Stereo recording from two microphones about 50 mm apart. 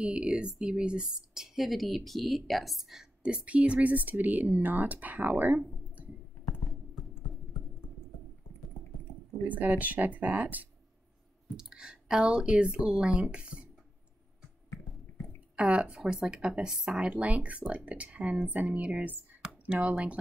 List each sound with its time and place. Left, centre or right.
0.0 s speech: right; by 3.1 s centre
3.2 s speech: right
6.6 s computer keyboard: centre
9.5 s speech: right
11.5 s speech: centre
15.5 s speech: right
16.0 s speech: centre
17.1 s speech: right